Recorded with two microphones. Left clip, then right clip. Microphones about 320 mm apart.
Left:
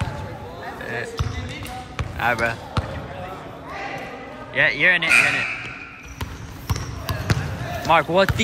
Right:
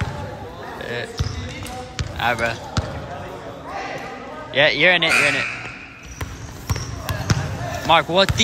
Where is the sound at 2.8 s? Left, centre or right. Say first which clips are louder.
Right 1 dB; centre.